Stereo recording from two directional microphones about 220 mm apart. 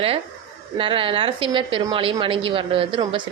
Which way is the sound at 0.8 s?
25° right (ahead or behind).